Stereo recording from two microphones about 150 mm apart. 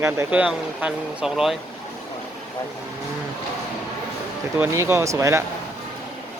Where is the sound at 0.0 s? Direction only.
10° right (ahead or behind).